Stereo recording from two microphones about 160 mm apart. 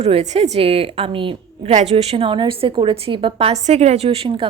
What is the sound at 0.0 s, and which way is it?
A woman's voice, 40° right (ahead or behind).